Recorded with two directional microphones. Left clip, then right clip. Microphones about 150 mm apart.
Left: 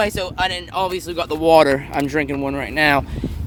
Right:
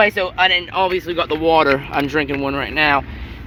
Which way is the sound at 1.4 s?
55° left (ahead or behind).